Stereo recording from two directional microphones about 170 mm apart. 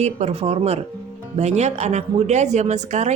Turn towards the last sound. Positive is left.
turn(degrees=-45)  # may be behind; listen again after turning